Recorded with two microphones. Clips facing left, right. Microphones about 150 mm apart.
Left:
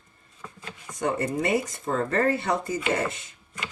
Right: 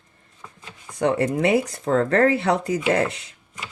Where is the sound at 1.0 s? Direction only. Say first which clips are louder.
Right 6 dB; 70° right (ahead or behind).